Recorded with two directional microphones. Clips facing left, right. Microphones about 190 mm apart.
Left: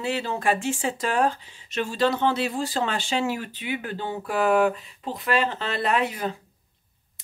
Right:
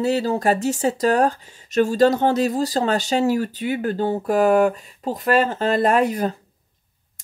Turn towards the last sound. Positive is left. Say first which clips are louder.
# right 6 dB
turn(degrees=-45)  # may be behind; listen again after turning